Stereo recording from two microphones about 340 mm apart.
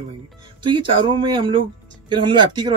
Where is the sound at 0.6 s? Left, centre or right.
Centre.